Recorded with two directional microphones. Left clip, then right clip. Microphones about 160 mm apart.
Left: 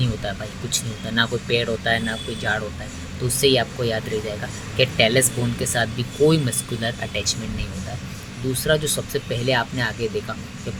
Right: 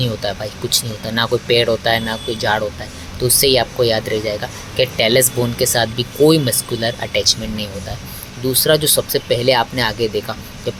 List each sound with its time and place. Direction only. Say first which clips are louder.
0.0 s speech: right 7 dB; 15° right (ahead or behind)
8.6 s speech: right 7 dB; 15° right (ahead or behind)